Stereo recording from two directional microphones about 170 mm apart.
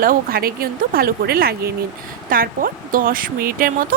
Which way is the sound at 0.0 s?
55° right (ahead or behind).